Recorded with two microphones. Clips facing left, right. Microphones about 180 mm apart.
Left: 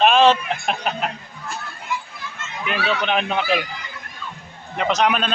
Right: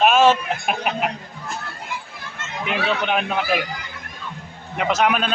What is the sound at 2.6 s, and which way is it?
Speech, 20° right (ahead or behind).